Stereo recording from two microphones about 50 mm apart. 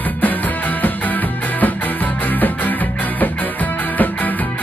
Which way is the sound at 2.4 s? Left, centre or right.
Left.